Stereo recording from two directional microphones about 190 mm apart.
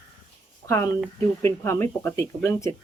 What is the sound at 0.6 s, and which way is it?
Speech, 15° left (ahead or behind).